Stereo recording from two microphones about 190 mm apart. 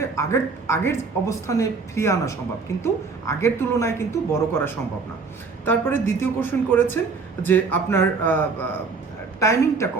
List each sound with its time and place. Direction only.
0.0 s a woman's voice: 15° left (ahead or behind)